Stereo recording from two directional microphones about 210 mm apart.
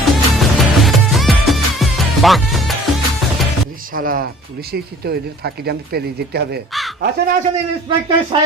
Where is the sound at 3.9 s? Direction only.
40° right (ahead or behind).